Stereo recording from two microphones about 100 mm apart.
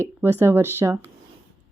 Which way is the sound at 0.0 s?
25° right (ahead or behind).